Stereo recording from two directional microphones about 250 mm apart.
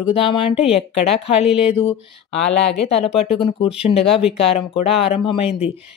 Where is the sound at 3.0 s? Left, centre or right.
Left.